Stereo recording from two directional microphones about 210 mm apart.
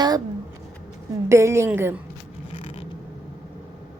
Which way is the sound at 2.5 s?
30° left (ahead or behind).